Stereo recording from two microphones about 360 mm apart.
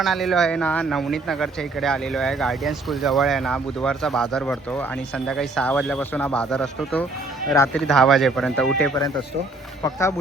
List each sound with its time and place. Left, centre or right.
0.0 s speech: centre